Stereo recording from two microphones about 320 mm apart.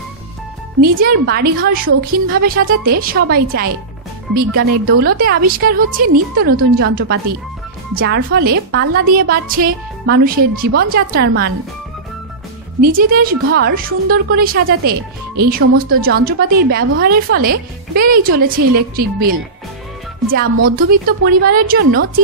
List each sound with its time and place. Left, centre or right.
0.7 s a woman's voice: right
12.8 s a woman's voice: right
20.6 s a woman's voice: right